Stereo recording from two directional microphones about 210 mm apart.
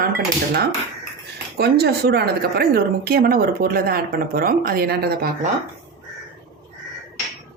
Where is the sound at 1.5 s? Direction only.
50° right (ahead or behind).